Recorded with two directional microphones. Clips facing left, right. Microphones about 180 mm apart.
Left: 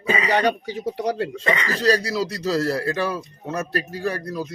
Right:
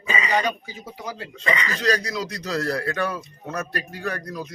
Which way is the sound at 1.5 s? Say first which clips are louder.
Left 2 dB; 35° left (ahead or behind).